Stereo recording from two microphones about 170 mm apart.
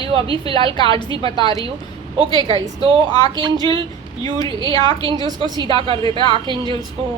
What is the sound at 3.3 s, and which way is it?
Speech, 25° right (ahead or behind).